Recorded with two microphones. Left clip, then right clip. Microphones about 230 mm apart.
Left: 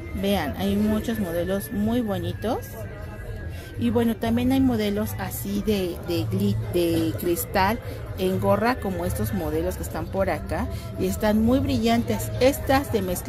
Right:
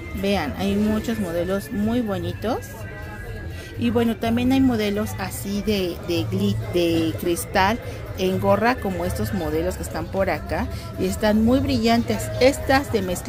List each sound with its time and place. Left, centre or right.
0.2 s speech: centre
3.8 s a woman's voice: centre